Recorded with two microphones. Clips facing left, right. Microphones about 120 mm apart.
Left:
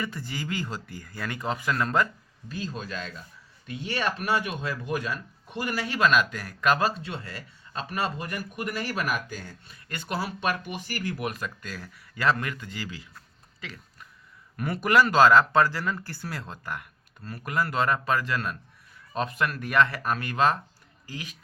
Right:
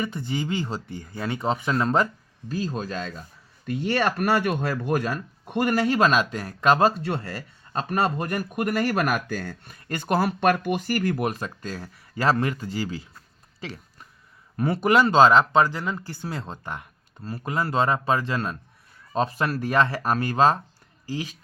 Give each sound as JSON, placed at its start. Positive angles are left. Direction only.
{"t": 0.0, "sound": "speech", "side_deg": -20}
{"t": 2.5, "sound": "speech", "side_deg": -40}
{"t": 3.7, "sound": "speech", "side_deg": -55}
{"t": 9.7, "sound": "speech", "side_deg": -45}
{"t": 11.3, "sound": "speech", "side_deg": -30}
{"t": 13.6, "sound": "a sound", "side_deg": -35}
{"t": 14.5, "sound": "speech", "side_deg": -30}